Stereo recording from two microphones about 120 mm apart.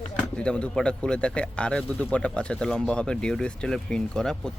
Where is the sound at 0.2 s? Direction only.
10° left (ahead or behind).